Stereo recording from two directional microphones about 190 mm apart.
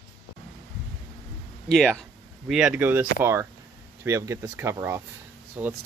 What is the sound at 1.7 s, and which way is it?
Speech, centre (ahead or behind).